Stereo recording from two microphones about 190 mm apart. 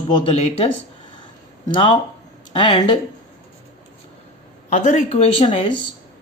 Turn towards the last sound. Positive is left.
turn(degrees=30)  # may be behind; listen again after turning